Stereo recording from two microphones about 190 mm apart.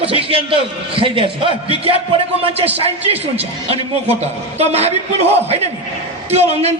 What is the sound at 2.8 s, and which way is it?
A man's voice, 35° right (ahead or behind).